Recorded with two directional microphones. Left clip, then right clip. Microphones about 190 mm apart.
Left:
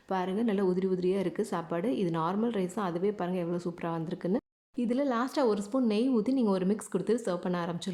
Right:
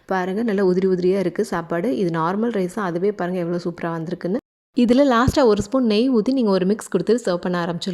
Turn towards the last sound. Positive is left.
turn(degrees=-30)  # may be behind; listen again after turning